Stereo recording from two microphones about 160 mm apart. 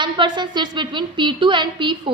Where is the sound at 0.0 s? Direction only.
30° right (ahead or behind).